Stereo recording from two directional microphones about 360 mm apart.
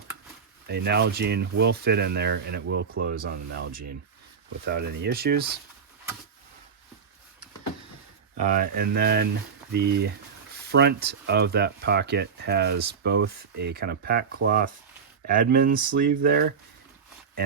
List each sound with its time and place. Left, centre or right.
0.7 s speech: right
8.4 s speech: right